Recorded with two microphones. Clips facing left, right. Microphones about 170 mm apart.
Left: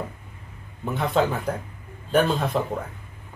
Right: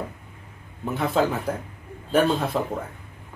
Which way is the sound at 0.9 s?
Centre (ahead or behind).